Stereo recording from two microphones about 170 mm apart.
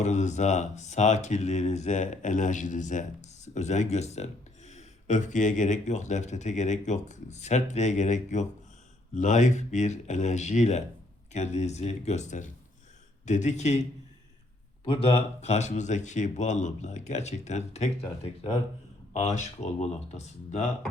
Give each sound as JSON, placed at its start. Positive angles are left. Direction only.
{"t": 0.0, "sound": "speech", "side_deg": 45}
{"t": 14.8, "sound": "speech", "side_deg": 35}
{"t": 19.1, "sound": "speech", "side_deg": 45}